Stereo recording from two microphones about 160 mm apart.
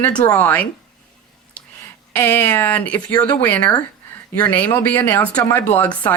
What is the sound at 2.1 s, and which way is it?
Speech, 10° left (ahead or behind).